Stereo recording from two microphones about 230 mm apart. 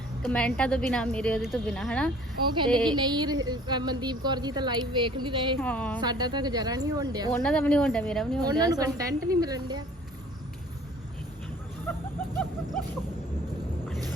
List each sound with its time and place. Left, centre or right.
0.3 s speech: centre
2.9 s a woman's voice: centre
5.5 s speech: centre
6.0 s speech: centre
7.3 s speech: centre
8.4 s speech: centre
11.9 s a sound: centre